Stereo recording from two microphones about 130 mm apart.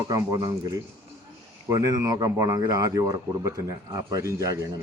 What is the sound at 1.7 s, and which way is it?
Speech, 25° right (ahead or behind).